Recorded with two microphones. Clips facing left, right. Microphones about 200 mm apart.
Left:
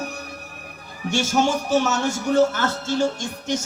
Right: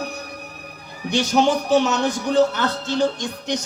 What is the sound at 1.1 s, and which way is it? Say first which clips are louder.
A woman's voice: right 2 dB; 15° right (ahead or behind).